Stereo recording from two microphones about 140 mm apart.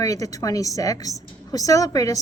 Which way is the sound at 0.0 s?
25° left (ahead or behind).